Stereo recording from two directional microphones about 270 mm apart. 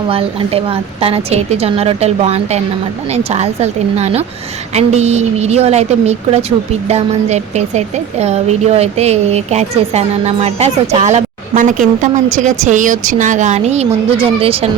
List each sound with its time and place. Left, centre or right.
0.1 s speech: right